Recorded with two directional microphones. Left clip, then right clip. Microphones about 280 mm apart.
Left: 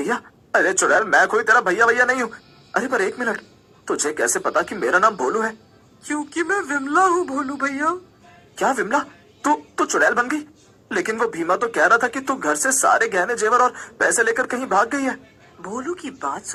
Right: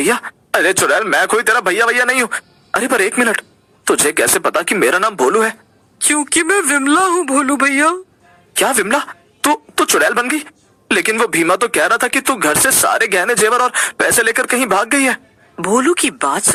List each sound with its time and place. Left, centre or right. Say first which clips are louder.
0.0 s a man's voice: right 8 dB; right
7.1 s a sound: right 7 dB; right
8.5 s a woman's voice: right 5 dB; right